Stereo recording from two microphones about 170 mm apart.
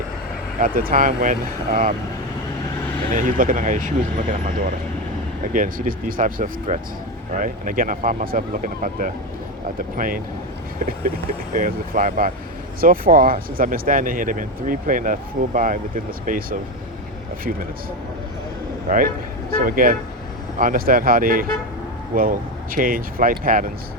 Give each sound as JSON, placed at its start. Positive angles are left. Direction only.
{"t": 0.6, "sound": "speech", "side_deg": -55}
{"t": 3.1, "sound": "speech", "side_deg": -55}
{"t": 11.5, "sound": "speech", "side_deg": -50}
{"t": 18.9, "sound": "speech", "side_deg": -55}